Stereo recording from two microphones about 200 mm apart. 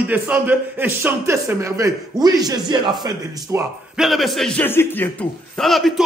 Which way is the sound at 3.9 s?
Centre (ahead or behind).